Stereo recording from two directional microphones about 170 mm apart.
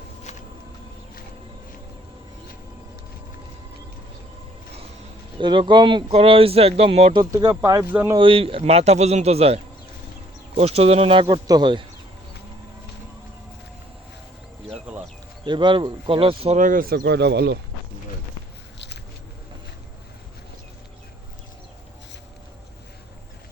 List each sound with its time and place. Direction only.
5.4 s speech: 30° right (ahead or behind)
7.2 s speech: 20° right (ahead or behind)
8.2 s speech: 30° right (ahead or behind)
10.6 s speech: 35° right (ahead or behind)
14.9 s a sound: 10° right (ahead or behind)
15.4 s speech: 30° right (ahead or behind)
16.6 s speech: 50° right (ahead or behind); by 17.6 s 80° right